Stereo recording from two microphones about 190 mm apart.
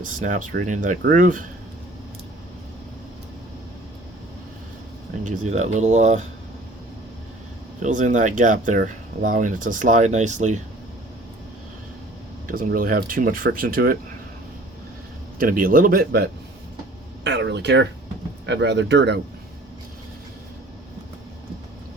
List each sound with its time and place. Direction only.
0.0 s speech: 45° right (ahead or behind)
5.2 s speech: 40° right (ahead or behind)
7.8 s speech: 40° right (ahead or behind)
12.5 s speech: 50° right (ahead or behind)
15.4 s speech: 50° right (ahead or behind); by 19.2 s 65° right (ahead or behind)